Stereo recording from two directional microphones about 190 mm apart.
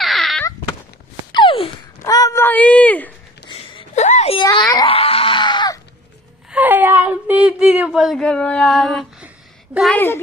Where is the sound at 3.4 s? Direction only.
30° left (ahead or behind).